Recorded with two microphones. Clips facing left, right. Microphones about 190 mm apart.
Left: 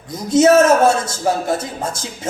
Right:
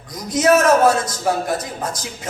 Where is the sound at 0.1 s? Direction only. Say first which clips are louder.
Left 4 dB; 25° left (ahead or behind).